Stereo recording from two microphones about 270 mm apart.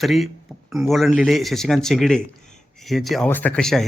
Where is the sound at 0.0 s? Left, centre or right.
Centre.